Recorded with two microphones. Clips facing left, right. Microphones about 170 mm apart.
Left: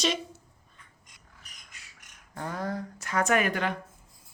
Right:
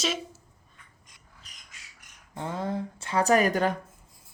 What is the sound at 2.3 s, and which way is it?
Speech, 25° right (ahead or behind).